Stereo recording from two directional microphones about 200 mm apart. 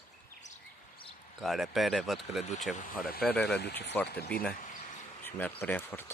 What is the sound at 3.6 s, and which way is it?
Speech, 55° left (ahead or behind).